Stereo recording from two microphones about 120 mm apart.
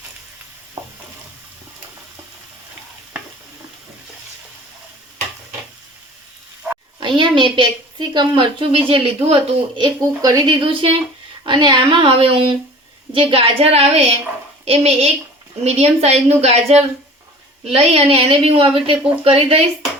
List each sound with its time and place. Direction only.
0.8 s stir: 25° right (ahead or behind)
7.0 s a woman's voice: 40° right (ahead or behind)
10.2 s a woman's voice: 30° right (ahead or behind); by 19.5 s 50° right (ahead or behind)